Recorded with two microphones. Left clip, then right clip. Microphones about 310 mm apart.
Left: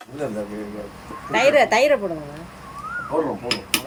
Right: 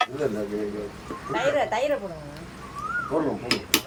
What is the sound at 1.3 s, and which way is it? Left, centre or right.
Speech, left.